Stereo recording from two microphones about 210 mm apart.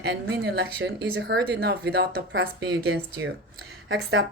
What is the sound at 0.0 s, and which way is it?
Speech, 50° right (ahead or behind).